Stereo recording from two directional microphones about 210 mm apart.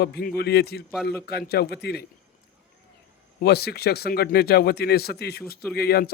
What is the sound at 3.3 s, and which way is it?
Speech, 50° left (ahead or behind).